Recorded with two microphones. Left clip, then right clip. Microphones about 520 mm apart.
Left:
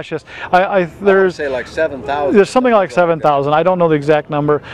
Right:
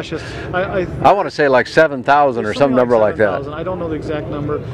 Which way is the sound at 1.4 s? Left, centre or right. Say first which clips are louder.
Right 6 dB; right.